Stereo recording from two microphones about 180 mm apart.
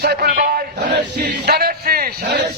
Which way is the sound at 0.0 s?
60° right (ahead or behind).